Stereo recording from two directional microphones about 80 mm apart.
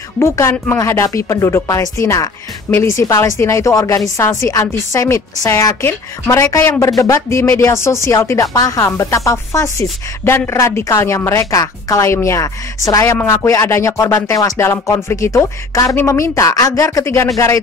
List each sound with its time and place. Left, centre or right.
0.2 s speech: left
10.2 s a woman's voice: left
10.6 s speech: left
17.0 s a woman's voice: left